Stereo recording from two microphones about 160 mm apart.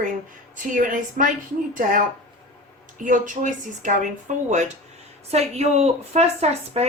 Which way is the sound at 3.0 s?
55° right (ahead or behind).